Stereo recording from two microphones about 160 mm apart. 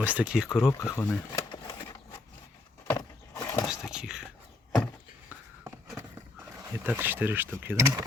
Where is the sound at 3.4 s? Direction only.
25° left (ahead or behind).